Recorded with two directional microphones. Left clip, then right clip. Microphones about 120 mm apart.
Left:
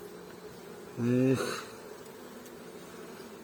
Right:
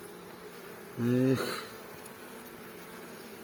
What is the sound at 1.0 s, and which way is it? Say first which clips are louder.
Speech: left 1 dB; 5° right (ahead or behind).